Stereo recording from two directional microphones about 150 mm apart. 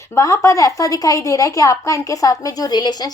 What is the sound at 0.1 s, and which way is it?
A woman's voice, 20° left (ahead or behind).